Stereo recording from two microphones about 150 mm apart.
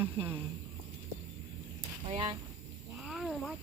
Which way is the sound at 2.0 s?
35° right (ahead or behind).